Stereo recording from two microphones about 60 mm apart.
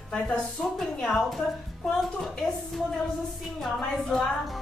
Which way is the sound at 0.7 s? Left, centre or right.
Centre.